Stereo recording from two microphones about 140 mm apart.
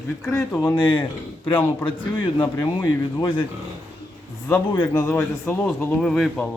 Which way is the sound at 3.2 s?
35° left (ahead or behind).